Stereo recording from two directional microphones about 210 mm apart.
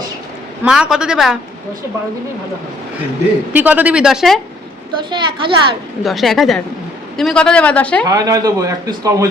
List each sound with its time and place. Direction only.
0.6 s speech: 5° right (ahead or behind)
3.5 s speech: 5° right (ahead or behind)
5.1 s a child's voice: 25° right (ahead or behind)
6.0 s speech: centre (ahead or behind)
8.0 s a man's voice: 20° right (ahead or behind)